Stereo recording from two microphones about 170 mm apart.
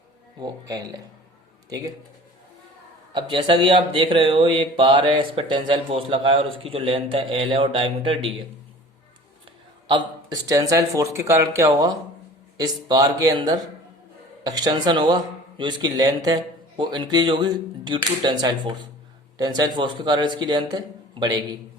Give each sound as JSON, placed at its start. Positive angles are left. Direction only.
{"t": 0.3, "sound": "speech", "side_deg": -25}
{"t": 3.1, "sound": "speech", "side_deg": -30}
{"t": 9.9, "sound": "speech", "side_deg": -25}